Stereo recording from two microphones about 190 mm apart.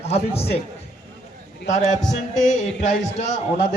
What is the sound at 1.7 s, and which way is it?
A man's voice, 40° left (ahead or behind).